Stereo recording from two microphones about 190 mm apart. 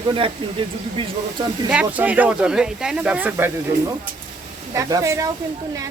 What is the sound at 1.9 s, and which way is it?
Speech, 10° right (ahead or behind).